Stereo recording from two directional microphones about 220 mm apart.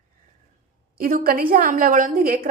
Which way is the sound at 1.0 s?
40° right (ahead or behind).